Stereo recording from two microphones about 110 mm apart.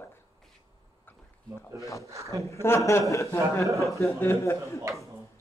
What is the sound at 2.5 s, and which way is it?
Speech, 25° left (ahead or behind).